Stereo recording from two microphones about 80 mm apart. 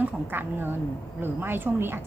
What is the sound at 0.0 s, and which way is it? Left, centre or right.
A woman's voice, right.